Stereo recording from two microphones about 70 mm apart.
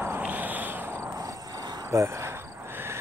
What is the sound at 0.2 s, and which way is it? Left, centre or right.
Cricket, right.